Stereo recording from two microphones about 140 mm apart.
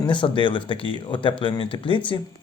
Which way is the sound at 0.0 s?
35° left (ahead or behind).